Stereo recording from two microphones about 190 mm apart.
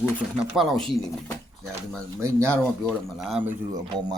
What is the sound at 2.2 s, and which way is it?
Speech, 15° right (ahead or behind).